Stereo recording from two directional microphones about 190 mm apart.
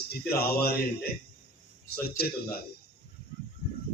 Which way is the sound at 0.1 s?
55° left (ahead or behind).